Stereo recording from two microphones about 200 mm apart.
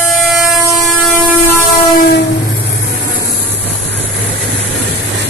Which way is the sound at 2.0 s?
55° left (ahead or behind).